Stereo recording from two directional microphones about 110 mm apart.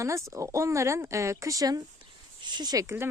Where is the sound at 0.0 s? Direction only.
30° right (ahead or behind).